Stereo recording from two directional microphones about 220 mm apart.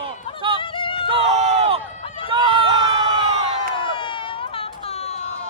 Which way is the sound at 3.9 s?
20° left (ahead or behind).